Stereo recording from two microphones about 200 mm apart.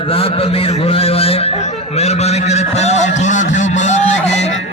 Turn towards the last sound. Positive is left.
turn(degrees=35)  # may be behind; listen again after turning